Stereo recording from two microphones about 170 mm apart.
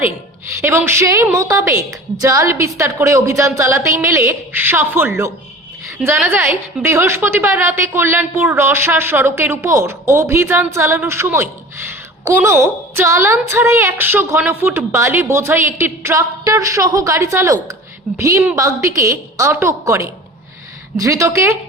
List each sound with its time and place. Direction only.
0.6 s a woman's voice: 15° right (ahead or behind)